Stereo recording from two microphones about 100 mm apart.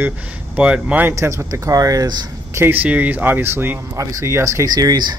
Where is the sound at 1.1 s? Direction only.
30° right (ahead or behind).